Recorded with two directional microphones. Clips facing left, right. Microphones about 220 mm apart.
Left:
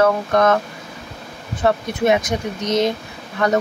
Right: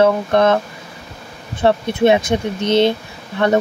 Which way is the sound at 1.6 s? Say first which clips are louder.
Right 4 dB; 25° right (ahead or behind).